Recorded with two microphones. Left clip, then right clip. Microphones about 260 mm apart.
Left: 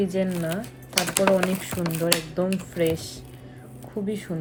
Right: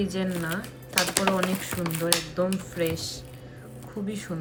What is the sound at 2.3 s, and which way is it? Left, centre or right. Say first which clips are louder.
Speech: left 2 dB; centre.